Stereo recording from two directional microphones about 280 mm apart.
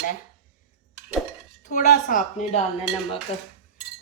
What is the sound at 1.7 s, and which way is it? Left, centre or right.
Speech, left.